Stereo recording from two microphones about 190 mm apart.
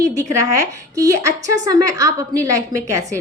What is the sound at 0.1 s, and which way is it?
A woman's voice, 15° right (ahead or behind).